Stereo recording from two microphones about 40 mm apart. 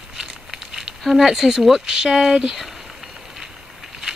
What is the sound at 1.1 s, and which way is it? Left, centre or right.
Speech, centre.